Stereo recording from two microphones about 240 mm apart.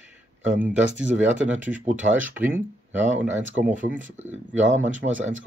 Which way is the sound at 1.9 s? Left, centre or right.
Right.